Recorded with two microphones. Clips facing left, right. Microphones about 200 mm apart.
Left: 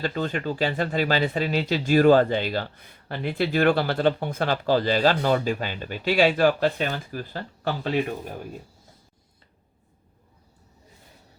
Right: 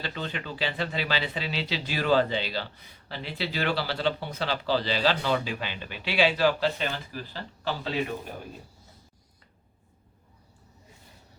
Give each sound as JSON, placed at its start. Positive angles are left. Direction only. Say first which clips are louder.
{"t": 0.0, "sound": "speech", "louder": "left 8 dB", "side_deg": 45}